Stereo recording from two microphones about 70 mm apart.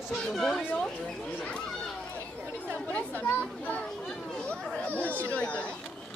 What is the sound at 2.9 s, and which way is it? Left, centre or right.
Children playing, left.